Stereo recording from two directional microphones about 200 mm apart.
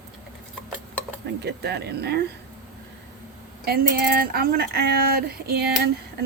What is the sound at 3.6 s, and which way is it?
Speech, 50° right (ahead or behind).